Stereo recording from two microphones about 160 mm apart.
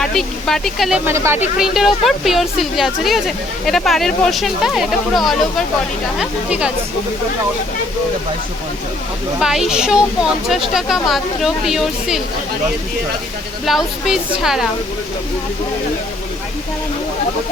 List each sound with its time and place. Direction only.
0.0 s speech: centre (ahead or behind)
1.1 s speech: 15° right (ahead or behind)
1.5 s speech: centre (ahead or behind)
9.4 s speech: 5° right (ahead or behind)
13.7 s speech: centre (ahead or behind)